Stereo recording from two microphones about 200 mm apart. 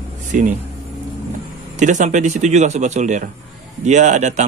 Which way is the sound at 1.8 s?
40° right (ahead or behind).